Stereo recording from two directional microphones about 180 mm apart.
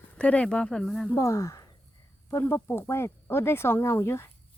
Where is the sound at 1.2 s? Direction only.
15° left (ahead or behind).